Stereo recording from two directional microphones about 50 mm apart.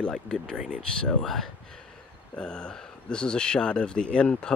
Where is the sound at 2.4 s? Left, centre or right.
Centre.